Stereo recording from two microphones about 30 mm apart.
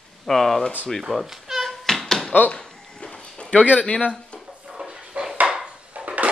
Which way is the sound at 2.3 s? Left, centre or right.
Left.